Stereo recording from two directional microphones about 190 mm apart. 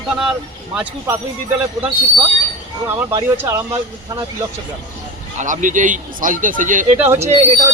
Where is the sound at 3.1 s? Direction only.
10° right (ahead or behind).